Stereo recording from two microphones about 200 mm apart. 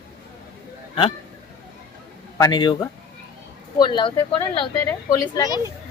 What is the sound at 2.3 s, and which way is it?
Speech, 20° left (ahead or behind).